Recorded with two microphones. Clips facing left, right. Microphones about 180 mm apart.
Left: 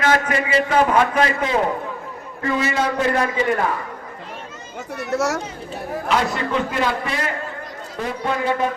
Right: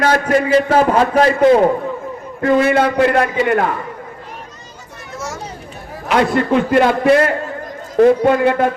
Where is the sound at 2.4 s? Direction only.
55° right (ahead or behind).